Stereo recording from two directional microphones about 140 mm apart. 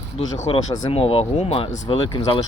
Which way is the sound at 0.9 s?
45° left (ahead or behind).